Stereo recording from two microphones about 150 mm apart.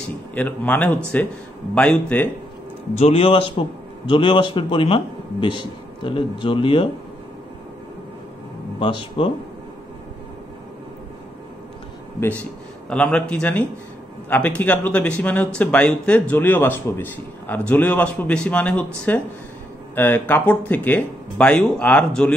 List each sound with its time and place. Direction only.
0.3 s speech: 10° left (ahead or behind)
2.9 s a man's voice: 45° left (ahead or behind)
8.7 s a man's voice: 35° left (ahead or behind)
12.9 s speech: 10° left (ahead or behind)